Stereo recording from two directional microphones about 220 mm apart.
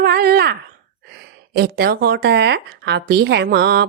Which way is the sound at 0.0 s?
45° right (ahead or behind).